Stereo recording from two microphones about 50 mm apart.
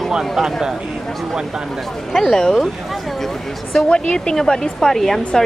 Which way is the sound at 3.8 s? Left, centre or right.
Centre.